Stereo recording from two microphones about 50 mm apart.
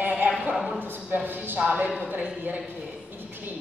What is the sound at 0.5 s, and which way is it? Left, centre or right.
Speech, centre.